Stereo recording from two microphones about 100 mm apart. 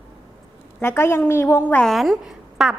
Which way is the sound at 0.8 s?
25° left (ahead or behind).